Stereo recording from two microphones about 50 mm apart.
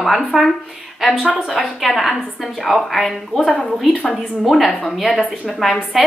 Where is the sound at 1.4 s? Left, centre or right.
Centre.